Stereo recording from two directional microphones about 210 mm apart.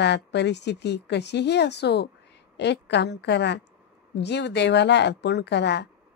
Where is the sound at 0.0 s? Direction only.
55° left (ahead or behind).